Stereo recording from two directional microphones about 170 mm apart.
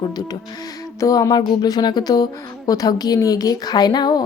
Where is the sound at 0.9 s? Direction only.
20° left (ahead or behind).